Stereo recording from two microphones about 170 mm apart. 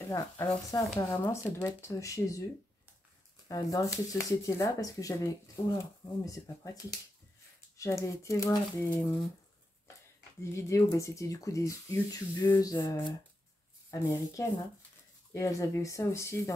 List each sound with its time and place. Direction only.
0.1 s speech: 20° left (ahead or behind)
3.4 s speech: 20° left (ahead or behind)
6.2 s speech: 20° left (ahead or behind)
10.4 s speech: 15° left (ahead or behind)